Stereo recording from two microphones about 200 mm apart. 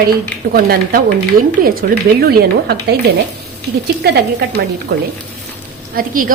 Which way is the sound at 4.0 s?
55° right (ahead or behind).